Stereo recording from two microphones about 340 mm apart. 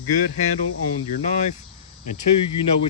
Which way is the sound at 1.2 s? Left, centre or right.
Centre.